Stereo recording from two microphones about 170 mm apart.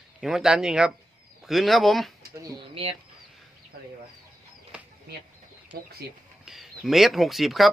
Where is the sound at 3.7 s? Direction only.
65° right (ahead or behind).